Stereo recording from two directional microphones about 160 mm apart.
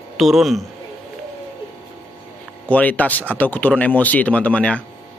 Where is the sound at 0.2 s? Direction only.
Centre (ahead or behind).